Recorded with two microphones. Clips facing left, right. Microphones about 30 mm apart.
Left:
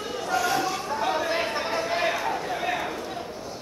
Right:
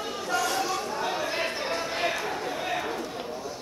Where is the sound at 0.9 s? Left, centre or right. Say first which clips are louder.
Left 4 dB; centre.